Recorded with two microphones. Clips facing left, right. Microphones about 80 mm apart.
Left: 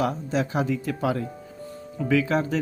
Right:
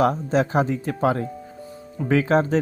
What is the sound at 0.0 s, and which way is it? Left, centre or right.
Speech, right.